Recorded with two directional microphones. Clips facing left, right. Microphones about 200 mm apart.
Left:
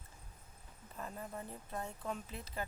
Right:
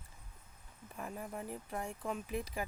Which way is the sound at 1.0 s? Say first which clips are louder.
Right 2 dB; 10° right (ahead or behind).